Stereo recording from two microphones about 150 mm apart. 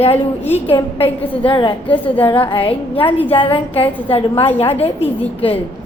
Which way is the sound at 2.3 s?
35° left (ahead or behind).